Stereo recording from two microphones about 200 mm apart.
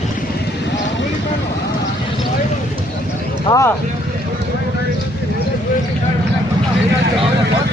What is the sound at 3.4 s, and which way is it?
Vehicle, 15° left (ahead or behind).